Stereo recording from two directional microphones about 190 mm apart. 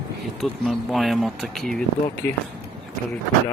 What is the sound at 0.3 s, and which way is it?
Speech, centre (ahead or behind).